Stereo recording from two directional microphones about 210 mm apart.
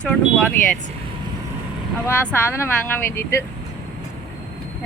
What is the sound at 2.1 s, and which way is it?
Speech, 10° left (ahead or behind).